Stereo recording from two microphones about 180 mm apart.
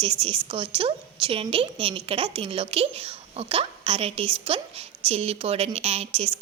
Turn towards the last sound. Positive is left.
turn(degrees=-35)  # may be behind; listen again after turning